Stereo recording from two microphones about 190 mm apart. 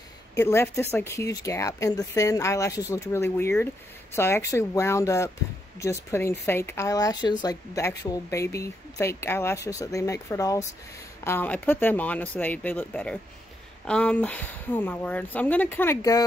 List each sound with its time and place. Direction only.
0.4 s speech: 15° left (ahead or behind)